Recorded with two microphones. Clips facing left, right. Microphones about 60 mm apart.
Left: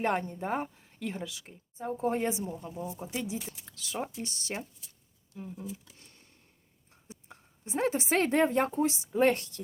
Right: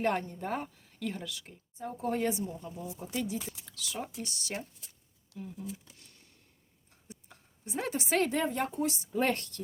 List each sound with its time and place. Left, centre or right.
0.0 s speech: left
1.8 s speech: left
3.1 s speech: centre
3.7 s speech: left
5.3 s speech: right
7.1 s a woman's voice: left